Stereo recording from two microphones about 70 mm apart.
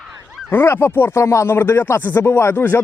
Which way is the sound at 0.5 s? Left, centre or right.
Left.